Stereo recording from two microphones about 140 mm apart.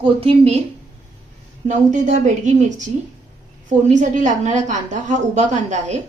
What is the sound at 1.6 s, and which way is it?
A woman's voice, 60° right (ahead or behind).